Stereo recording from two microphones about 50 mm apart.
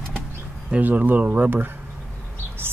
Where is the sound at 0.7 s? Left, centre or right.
Right.